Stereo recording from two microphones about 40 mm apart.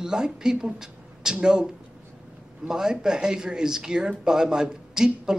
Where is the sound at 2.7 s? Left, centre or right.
Centre.